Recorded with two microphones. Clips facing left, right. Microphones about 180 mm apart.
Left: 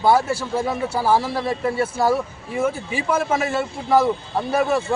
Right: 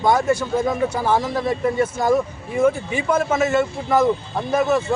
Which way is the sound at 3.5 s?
10° left (ahead or behind).